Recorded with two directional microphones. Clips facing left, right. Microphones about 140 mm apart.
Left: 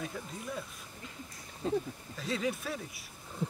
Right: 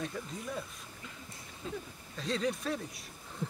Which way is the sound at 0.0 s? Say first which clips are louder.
Right 1 dB; centre (ahead or behind).